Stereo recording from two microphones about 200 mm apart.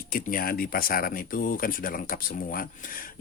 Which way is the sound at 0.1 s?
45° left (ahead or behind).